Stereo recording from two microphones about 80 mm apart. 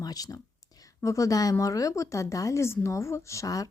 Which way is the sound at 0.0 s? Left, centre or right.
Left.